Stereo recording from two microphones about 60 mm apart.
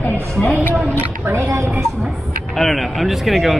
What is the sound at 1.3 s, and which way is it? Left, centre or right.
Speech, right.